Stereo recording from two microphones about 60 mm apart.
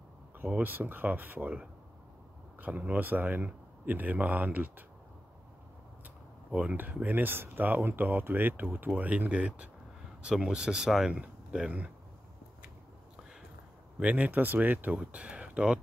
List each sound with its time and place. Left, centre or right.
0.5 s speech: right
2.6 s speech: right
6.5 s speech: right
13.9 s speech: right